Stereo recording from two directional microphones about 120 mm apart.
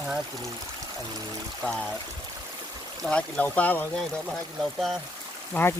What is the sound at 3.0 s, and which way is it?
Speech, 10° left (ahead or behind).